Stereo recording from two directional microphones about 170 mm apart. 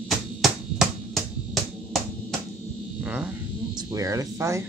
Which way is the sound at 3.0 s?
5° right (ahead or behind).